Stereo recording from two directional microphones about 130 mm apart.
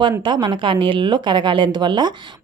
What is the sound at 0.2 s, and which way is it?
Speech, 35° right (ahead or behind).